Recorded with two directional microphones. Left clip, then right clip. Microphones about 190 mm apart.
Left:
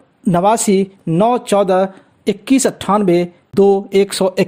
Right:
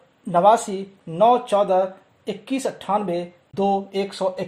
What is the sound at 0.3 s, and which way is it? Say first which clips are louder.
Speech: left 3 dB; 45° left (ahead or behind).